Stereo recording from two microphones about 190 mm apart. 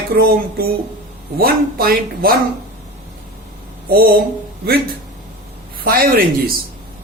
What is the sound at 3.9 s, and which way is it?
Speech, 55° right (ahead or behind).